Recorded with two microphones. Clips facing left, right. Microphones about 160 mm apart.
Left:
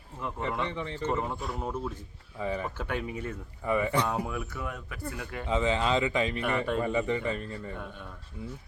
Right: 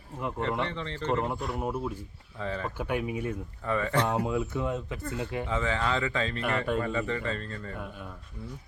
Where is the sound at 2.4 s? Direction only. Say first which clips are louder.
Left 1 dB; 15° left (ahead or behind).